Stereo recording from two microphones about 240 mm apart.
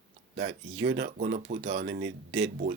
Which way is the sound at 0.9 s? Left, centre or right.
Right.